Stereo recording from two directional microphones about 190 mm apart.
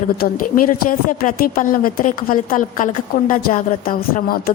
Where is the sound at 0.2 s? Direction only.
50° left (ahead or behind).